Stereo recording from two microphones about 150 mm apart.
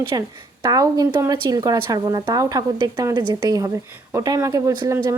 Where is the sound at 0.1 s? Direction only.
25° right (ahead or behind).